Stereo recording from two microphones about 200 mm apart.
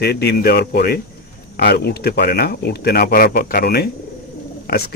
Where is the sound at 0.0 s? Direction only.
55° left (ahead or behind).